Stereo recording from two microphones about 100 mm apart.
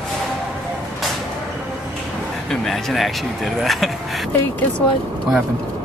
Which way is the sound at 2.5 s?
5° left (ahead or behind).